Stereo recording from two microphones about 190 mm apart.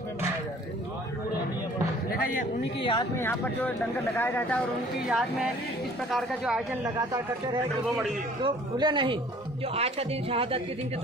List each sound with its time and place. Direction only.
2.8 s speech: 25° left (ahead or behind)
3.2 s speech: 10° left (ahead or behind)
5.0 s speech: centre (ahead or behind)
8.4 s a man's voice: 25° right (ahead or behind)